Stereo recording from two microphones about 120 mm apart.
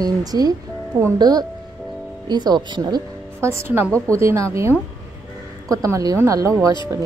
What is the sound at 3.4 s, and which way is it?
A woman's voice, 20° right (ahead or behind).